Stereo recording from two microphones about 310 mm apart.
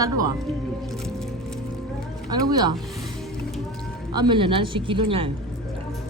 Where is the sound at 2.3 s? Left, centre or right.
Centre.